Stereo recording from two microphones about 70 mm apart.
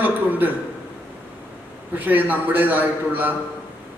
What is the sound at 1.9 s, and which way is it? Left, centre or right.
A man's voice, right.